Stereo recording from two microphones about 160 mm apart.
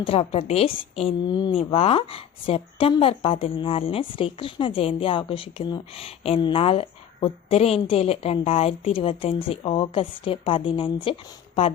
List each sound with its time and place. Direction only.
0.0 s a woman's voice: 40° left (ahead or behind)